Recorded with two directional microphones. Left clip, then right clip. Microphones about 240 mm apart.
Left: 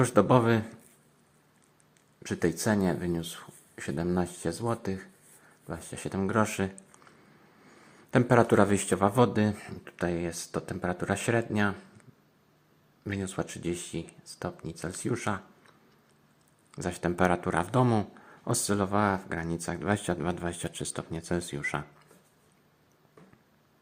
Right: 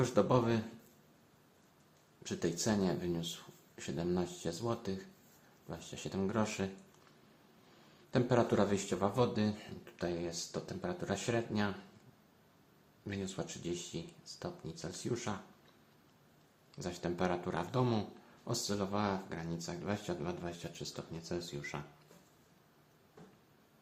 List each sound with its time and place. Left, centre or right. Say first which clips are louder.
0.0 s speech: left 8 dB; left
2.2 s speech: left 8 dB; left
8.1 s speech: left 9 dB; left
13.1 s speech: left 7 dB; left
16.7 s speech: left 9 dB; left